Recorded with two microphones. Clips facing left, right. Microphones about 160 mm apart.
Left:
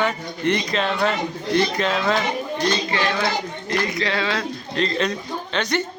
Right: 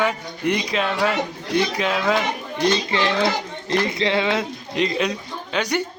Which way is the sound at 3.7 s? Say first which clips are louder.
Right 4 dB; 25° right (ahead or behind).